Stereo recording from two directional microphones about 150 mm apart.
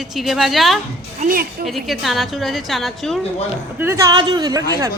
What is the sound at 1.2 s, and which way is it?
Speech, 70° right (ahead or behind).